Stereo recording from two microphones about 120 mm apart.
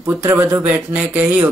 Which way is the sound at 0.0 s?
20° right (ahead or behind).